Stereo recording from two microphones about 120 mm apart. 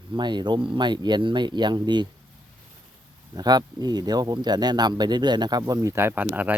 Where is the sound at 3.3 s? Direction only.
35° right (ahead or behind).